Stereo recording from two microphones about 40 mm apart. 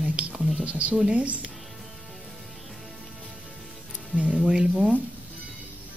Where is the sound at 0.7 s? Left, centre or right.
Right.